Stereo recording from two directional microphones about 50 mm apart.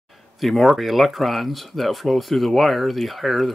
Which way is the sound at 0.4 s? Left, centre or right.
Centre.